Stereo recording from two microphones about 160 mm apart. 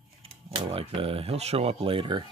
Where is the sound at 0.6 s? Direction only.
35° right (ahead or behind).